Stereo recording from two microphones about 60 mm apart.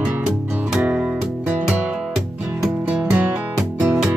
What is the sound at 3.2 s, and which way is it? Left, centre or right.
Music, right.